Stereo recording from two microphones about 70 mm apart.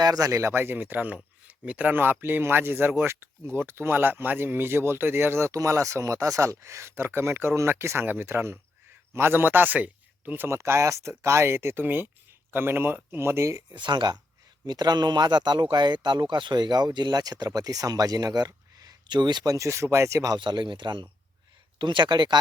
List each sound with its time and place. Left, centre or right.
0.0 s speech: right
0.3 s speech: right
5.5 s speech: right
10.6 s speech: right
13.7 s speech: right
19.5 s speech: right
20.3 s speech: right